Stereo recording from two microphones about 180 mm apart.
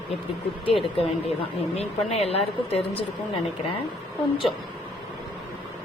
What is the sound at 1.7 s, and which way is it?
A woman's voice, 35° left (ahead or behind).